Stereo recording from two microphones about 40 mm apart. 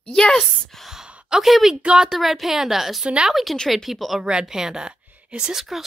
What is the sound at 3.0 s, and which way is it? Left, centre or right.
Speech, right.